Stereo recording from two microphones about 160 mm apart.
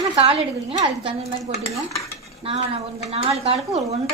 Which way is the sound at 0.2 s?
40° right (ahead or behind).